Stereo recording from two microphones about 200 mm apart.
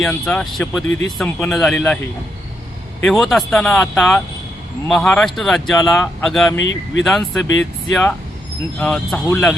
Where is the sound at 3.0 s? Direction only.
Centre (ahead or behind).